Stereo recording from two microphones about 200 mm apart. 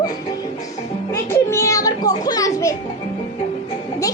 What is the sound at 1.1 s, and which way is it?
Children playing, 15° left (ahead or behind).